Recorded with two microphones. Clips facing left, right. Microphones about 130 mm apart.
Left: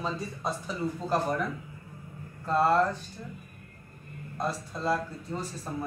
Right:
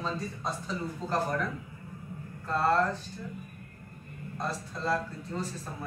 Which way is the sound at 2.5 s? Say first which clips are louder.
Left 3 dB; 15° left (ahead or behind).